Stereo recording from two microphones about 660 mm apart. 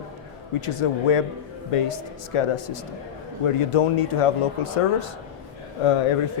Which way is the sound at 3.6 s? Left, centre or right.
Left.